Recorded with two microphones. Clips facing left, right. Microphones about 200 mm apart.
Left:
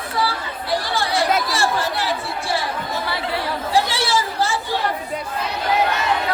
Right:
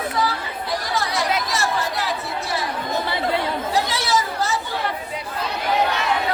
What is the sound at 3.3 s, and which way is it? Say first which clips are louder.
Chatter: right 3 dB; 20° right (ahead or behind).